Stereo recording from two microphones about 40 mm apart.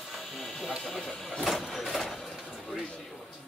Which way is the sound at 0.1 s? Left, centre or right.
Centre.